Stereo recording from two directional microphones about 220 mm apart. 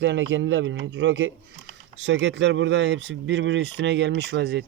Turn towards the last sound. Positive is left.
turn(degrees=-50)  # may be behind; listen again after turning